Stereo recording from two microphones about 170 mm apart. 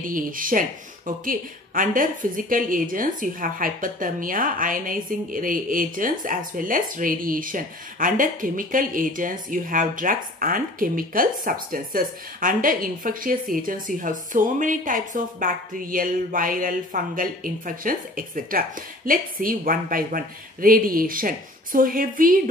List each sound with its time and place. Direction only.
0.0 s speech: 55° right (ahead or behind)